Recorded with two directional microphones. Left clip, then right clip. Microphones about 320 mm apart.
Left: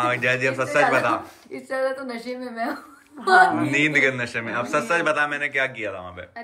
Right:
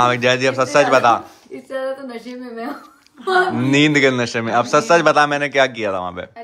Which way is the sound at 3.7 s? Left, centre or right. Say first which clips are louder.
Right 5 dB; centre.